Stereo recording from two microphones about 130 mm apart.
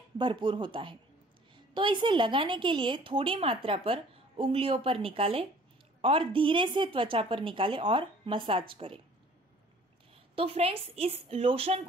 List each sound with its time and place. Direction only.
0.2 s a woman's voice: 40° right (ahead or behind)
10.3 s a woman's voice: 45° right (ahead or behind)